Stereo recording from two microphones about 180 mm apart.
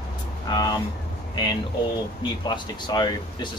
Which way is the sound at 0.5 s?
20° left (ahead or behind).